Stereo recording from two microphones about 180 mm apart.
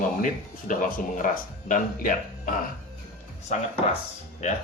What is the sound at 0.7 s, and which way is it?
Speech, 45° left (ahead or behind).